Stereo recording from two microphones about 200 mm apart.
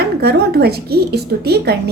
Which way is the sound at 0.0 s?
55° right (ahead or behind).